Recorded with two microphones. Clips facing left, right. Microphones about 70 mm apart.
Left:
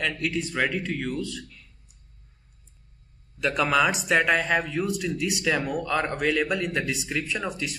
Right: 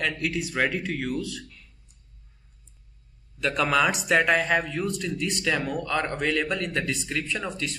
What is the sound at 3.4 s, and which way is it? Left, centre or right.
A man's voice, centre.